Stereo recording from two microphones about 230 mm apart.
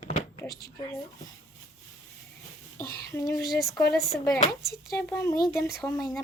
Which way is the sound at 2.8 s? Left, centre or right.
Left.